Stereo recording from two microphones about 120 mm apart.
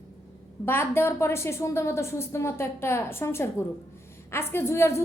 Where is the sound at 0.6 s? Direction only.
20° left (ahead or behind).